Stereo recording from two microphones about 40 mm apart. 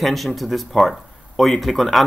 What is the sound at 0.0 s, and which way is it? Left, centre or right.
Speech, centre.